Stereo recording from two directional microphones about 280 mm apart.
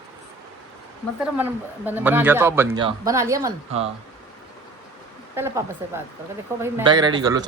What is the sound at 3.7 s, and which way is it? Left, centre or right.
Speech, right.